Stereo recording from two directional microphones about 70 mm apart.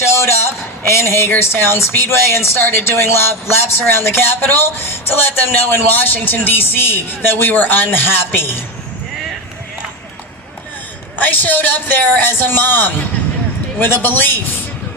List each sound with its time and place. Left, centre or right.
0.1 s a man's voice: left
11.2 s speech: left